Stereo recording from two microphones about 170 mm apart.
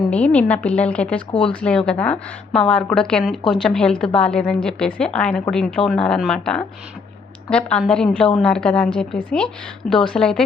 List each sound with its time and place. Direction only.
0.1 s a woman's voice: 5° left (ahead or behind)
1.3 s speech: 30° left (ahead or behind)
1.6 s a woman's voice: 5° left (ahead or behind)
9.8 s a woman's voice: 50° left (ahead or behind)
10.2 s a woman's voice: 5° left (ahead or behind)